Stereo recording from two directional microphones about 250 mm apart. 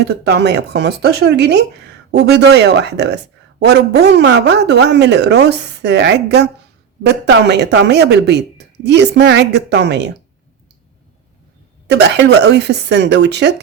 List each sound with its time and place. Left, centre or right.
0.0 s speech: right
11.9 s speech: right